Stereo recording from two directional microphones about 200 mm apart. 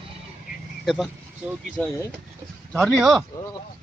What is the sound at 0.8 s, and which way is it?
Speech, centre (ahead or behind).